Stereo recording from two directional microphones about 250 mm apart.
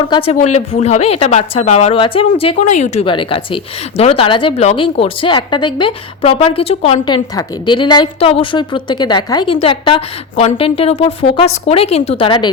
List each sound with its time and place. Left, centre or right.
0.1 s a woman's voice: left